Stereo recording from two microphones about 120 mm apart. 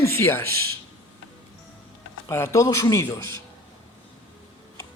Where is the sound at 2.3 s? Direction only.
25° left (ahead or behind).